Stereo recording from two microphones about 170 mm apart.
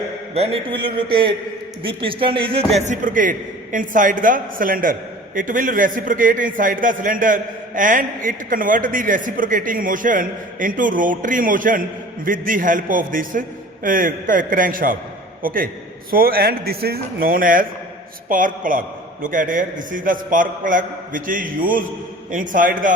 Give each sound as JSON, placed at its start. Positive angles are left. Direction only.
{"t": 0.3, "sound": "a man's voice", "side_deg": -35}
{"t": 2.8, "sound": "a man's voice", "side_deg": -50}